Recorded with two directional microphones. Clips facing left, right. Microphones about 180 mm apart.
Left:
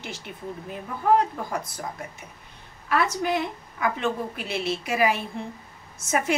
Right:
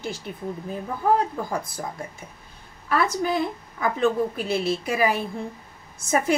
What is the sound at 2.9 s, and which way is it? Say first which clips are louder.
A woman's voice: right 1 dB; 35° right (ahead or behind).